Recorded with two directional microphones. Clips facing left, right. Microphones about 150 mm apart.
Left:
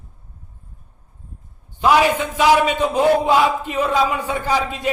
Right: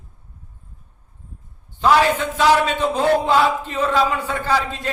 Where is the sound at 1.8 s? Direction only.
10° left (ahead or behind).